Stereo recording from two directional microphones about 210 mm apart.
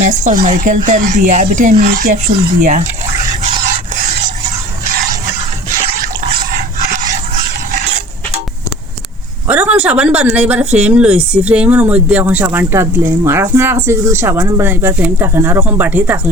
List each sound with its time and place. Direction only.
0.3 s speech: 35° right (ahead or behind)
6.5 s a sound: 40° right (ahead or behind)
9.5 s speech: 5° right (ahead or behind)